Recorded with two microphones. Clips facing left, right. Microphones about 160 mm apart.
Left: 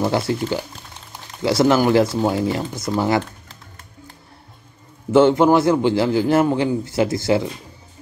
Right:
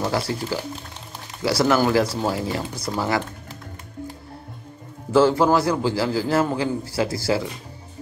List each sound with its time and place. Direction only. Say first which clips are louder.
0.1 s a man's voice: left 4 dB; 25° left (ahead or behind)
5.1 s a man's voice: left 4 dB; 20° left (ahead or behind)